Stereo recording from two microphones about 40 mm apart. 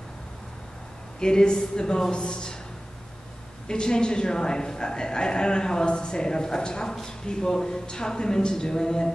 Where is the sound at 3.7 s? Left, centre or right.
Centre.